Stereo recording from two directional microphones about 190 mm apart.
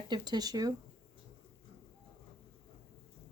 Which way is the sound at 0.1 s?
20° right (ahead or behind).